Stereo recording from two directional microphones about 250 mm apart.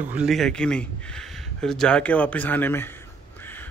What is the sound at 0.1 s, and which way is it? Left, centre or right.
A man's voice, centre.